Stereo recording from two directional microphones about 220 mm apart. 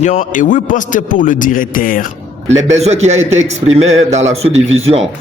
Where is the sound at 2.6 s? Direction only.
30° right (ahead or behind).